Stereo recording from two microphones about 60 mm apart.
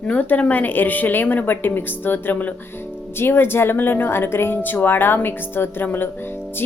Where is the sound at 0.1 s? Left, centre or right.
Left.